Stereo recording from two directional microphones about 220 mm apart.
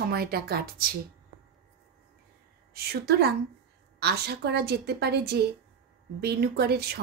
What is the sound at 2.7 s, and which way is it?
A woman's voice, 45° right (ahead or behind).